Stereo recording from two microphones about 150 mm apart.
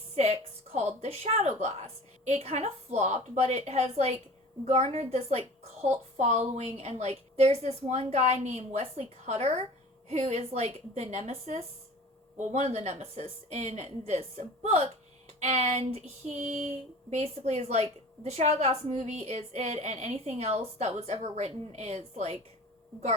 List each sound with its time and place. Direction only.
0.2 s a woman's voice: 45° right (ahead or behind)
2.2 s female singing: 50° right (ahead or behind)